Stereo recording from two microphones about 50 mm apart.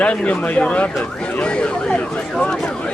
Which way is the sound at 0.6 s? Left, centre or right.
Left.